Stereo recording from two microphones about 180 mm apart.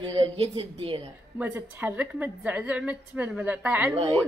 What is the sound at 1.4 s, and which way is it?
A woman's voice, 10° right (ahead or behind).